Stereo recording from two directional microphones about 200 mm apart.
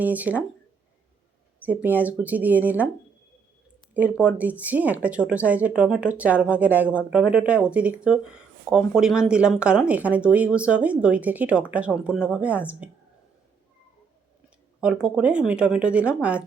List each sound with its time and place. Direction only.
0.0 s speech: 10° right (ahead or behind)
1.6 s speech: 10° right (ahead or behind)
3.9 s speech: 5° right (ahead or behind)
15.0 s speech: 5° right (ahead or behind)